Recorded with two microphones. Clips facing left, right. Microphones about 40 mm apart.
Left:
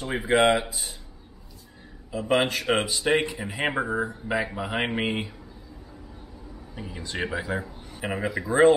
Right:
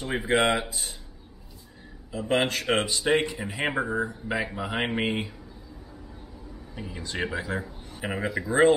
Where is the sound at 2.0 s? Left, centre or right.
Centre.